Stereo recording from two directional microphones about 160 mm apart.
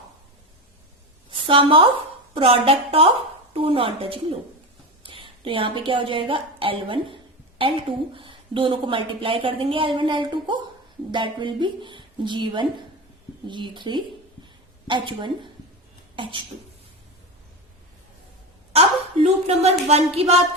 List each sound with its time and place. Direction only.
1.3 s a woman's voice: 35° right (ahead or behind)
5.0 s a sound: 35° right (ahead or behind)
5.9 s a woman's voice: 30° right (ahead or behind)
18.7 s a woman's voice: 40° right (ahead or behind)